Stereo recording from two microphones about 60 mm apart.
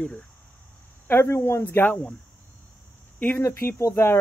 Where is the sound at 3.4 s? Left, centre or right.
Left.